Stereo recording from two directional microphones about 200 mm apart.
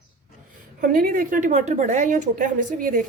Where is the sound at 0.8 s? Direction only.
45° right (ahead or behind).